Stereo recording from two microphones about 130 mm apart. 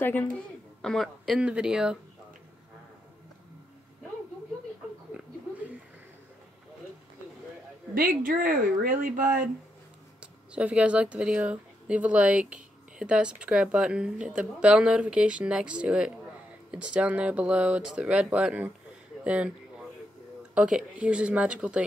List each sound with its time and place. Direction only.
0.0 s a woman's voice: 15° left (ahead or behind)
0.8 s speech: centre (ahead or behind)
5.1 s a sound: 10° right (ahead or behind)
8.0 s speech: 90° right
10.2 s speech: 10° right (ahead or behind)
20.5 s speech: 5° right (ahead or behind)